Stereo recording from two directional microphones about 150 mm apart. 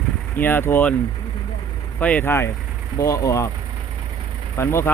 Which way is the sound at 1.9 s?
10° left (ahead or behind).